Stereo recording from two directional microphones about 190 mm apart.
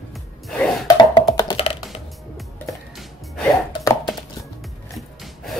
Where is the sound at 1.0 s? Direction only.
20° left (ahead or behind).